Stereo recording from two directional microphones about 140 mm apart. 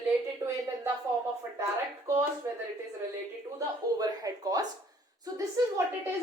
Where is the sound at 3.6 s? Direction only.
25° right (ahead or behind).